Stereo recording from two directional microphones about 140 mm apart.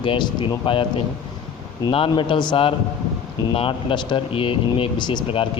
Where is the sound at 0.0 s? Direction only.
35° left (ahead or behind).